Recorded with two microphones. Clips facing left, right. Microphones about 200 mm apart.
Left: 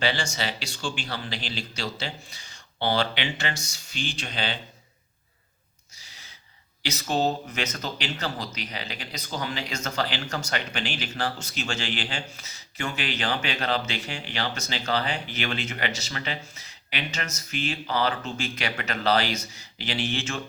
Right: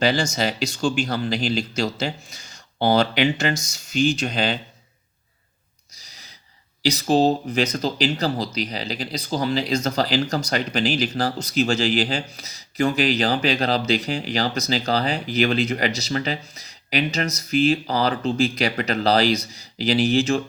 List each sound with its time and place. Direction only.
0.0 s speech: 40° right (ahead or behind)
6.0 s gasp: 40° right (ahead or behind)
6.8 s speech: 35° right (ahead or behind)